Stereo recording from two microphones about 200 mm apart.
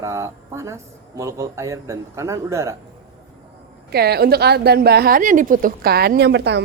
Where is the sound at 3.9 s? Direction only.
50° right (ahead or behind).